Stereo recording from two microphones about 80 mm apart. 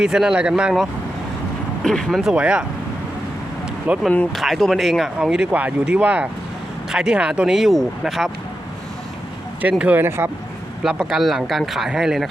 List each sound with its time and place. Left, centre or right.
0.0 s speech: centre
1.8 s speech: centre
2.2 s speech: centre
3.9 s speech: centre
4.3 s speech: centre
5.5 s speech: centre
9.6 s speech: centre
10.0 s speech: right
10.8 s speech: centre